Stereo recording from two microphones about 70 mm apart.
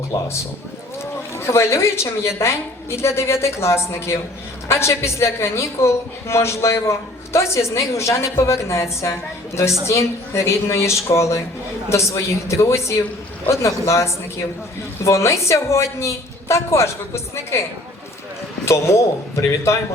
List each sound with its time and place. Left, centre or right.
1.4 s a woman's voice: left